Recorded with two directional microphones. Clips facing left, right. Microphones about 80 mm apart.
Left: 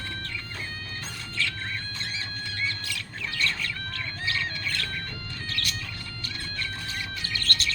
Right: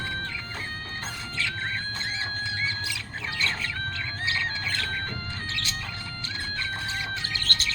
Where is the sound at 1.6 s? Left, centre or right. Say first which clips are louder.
Right 4 dB; right.